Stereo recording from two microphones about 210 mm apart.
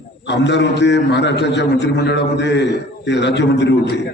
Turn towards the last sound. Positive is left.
turn(degrees=55)  # may be behind; listen again after turning